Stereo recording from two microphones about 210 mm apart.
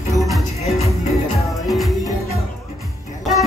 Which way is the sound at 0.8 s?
30° left (ahead or behind).